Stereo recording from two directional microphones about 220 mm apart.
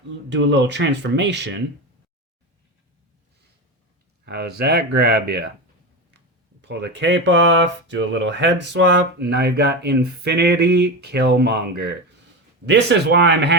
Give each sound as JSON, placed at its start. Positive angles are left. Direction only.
{"t": 0.3, "sound": "speech", "side_deg": -55}
{"t": 4.3, "sound": "speech", "side_deg": -45}
{"t": 6.6, "sound": "speech", "side_deg": -50}